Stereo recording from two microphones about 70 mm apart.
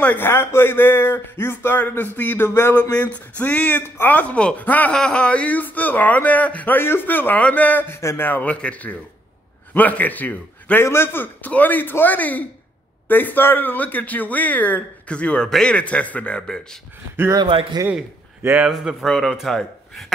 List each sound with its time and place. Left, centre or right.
0.2 s speech: left
4.9 s speech: centre
7.9 s speech: left
8.3 s a man's voice: left
17.3 s a man's voice: right
18.4 s a man's voice: right
18.9 s a man's voice: centre